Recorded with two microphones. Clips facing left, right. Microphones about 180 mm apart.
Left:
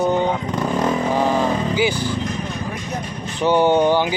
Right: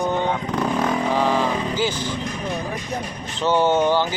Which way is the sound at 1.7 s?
15° left (ahead or behind).